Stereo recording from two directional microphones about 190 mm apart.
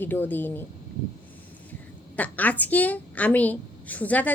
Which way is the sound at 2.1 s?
10° left (ahead or behind).